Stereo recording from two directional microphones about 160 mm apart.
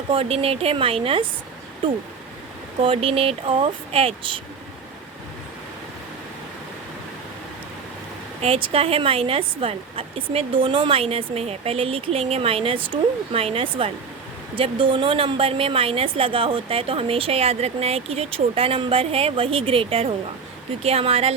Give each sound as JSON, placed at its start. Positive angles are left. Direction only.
{"t": 0.1, "sound": "a woman's voice", "side_deg": -35}
{"t": 2.8, "sound": "a woman's voice", "side_deg": -35}
{"t": 8.4, "sound": "a woman's voice", "side_deg": -35}